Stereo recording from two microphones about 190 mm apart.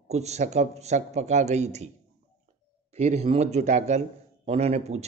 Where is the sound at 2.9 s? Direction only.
35° right (ahead or behind).